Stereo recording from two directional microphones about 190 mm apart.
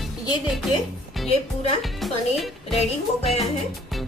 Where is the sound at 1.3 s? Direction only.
30° left (ahead or behind).